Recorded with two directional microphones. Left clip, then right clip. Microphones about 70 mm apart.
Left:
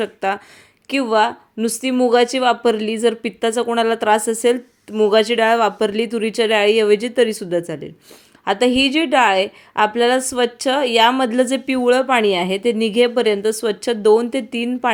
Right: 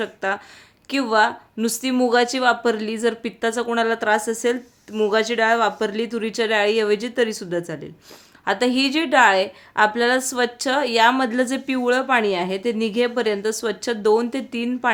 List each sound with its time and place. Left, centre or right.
0.0 s a woman's voice: left
0.9 s a woman's voice: left
2.1 s a woman's voice: left
8.4 s a woman's voice: left